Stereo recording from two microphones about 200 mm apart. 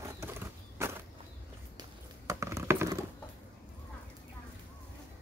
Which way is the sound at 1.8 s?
15° right (ahead or behind).